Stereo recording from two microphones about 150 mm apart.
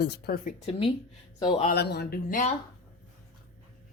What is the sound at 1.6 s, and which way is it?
Speech, 75° left (ahead or behind).